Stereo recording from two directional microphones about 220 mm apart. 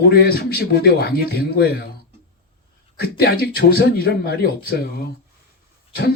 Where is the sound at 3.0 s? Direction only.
45° left (ahead or behind).